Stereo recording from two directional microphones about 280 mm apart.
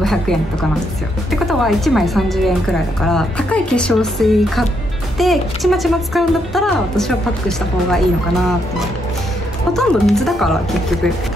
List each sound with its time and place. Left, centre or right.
0.0 s a woman's voice: centre